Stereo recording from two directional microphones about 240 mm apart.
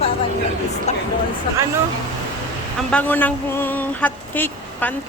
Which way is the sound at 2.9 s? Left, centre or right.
Centre.